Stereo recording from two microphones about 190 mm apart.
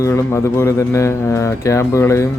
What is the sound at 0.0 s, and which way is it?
A man's voice, 15° left (ahead or behind).